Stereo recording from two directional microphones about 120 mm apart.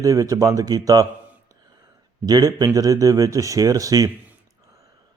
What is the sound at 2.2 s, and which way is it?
Speech, 30° right (ahead or behind).